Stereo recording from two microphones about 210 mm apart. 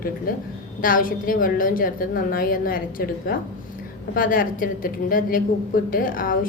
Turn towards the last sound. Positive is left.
turn(degrees=40)  # may be behind; listen again after turning